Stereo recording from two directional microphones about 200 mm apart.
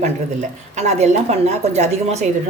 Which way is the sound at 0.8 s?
35° right (ahead or behind).